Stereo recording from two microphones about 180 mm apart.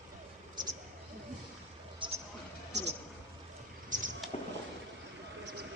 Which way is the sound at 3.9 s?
45° right (ahead or behind).